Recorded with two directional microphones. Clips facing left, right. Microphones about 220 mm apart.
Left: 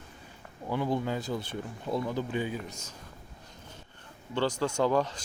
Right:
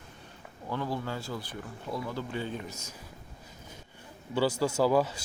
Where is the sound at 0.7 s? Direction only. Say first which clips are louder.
Left 4 dB; 15° left (ahead or behind).